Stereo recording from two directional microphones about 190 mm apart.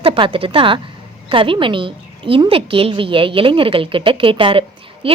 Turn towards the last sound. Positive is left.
turn(degrees=-30)  # may be behind; listen again after turning